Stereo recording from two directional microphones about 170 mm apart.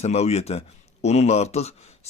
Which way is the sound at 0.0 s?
40° left (ahead or behind).